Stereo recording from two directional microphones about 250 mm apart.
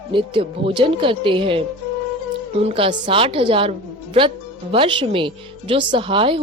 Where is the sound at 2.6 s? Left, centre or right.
Right.